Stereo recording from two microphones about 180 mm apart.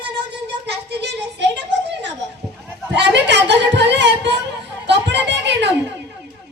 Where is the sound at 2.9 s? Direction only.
75° right (ahead or behind).